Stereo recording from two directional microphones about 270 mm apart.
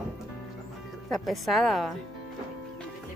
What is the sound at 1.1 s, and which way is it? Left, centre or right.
Speech, centre.